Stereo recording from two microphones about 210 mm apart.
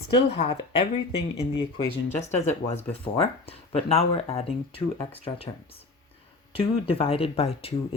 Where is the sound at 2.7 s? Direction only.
25° left (ahead or behind).